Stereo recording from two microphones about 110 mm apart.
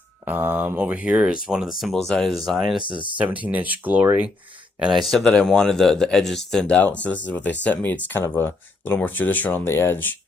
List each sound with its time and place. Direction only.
0.3 s speech: 15° right (ahead or behind)
3.2 s speech: 15° right (ahead or behind)
4.8 s speech: centre (ahead or behind); by 10.1 s 20° left (ahead or behind)